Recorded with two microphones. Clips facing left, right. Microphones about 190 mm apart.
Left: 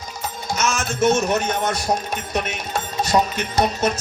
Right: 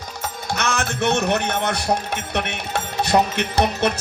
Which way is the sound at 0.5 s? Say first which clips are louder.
Even; 65° right (ahead or behind).